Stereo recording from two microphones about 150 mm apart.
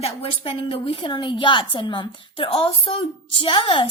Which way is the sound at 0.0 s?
40° left (ahead or behind).